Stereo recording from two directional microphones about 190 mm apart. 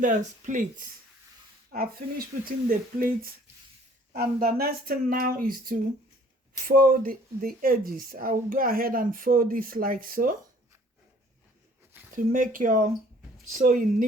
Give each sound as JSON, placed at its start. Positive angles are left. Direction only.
{"t": 0.0, "sound": "speech", "side_deg": -40}
{"t": 12.1, "sound": "speech", "side_deg": -45}